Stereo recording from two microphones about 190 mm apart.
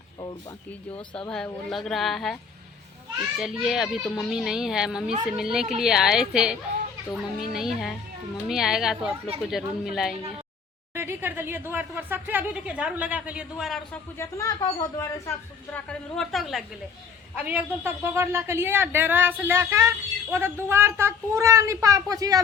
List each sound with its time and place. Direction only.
1.3 s a child's voice: centre (ahead or behind)
10.9 s a man's voice: 10° right (ahead or behind)
14.2 s a woman's voice: 15° left (ahead or behind); by 22.4 s 20° right (ahead or behind)